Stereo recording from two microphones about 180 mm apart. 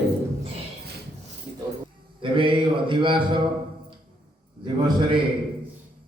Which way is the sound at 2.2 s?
30° right (ahead or behind).